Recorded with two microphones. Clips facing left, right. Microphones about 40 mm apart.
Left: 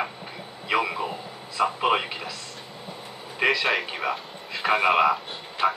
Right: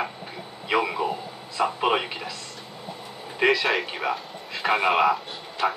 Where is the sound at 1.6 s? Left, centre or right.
Centre.